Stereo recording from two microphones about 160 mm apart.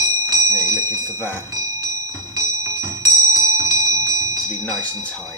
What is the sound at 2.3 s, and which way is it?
Music, 20° right (ahead or behind).